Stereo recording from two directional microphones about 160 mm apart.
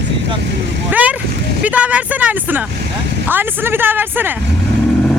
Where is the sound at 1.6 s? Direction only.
10° right (ahead or behind).